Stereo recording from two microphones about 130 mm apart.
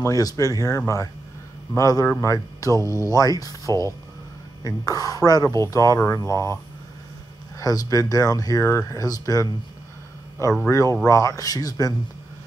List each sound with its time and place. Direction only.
0.0 s speech: 25° left (ahead or behind)
10.7 s speech: 25° left (ahead or behind)